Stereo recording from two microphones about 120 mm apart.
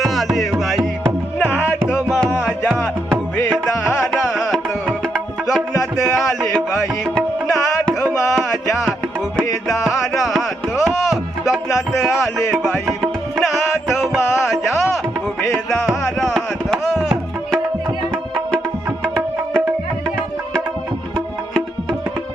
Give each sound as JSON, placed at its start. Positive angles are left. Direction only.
{"t": 0.0, "sound": "music", "side_deg": 0}
{"t": 1.4, "sound": "music", "side_deg": 15}
{"t": 2.4, "sound": "music", "side_deg": 0}
{"t": 4.1, "sound": "music", "side_deg": 5}
{"t": 9.8, "sound": "music", "side_deg": 0}
{"t": 11.9, "sound": "music", "side_deg": 0}
{"t": 19.0, "sound": "music", "side_deg": 5}